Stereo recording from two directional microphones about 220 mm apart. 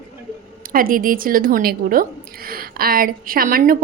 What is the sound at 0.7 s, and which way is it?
A woman's voice, 40° right (ahead or behind).